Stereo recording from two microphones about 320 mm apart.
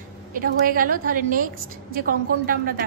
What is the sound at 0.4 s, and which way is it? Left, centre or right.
A woman's voice, right.